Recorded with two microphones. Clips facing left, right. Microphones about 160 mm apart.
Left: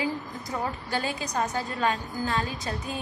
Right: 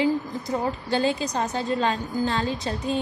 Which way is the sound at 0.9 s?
25° right (ahead or behind).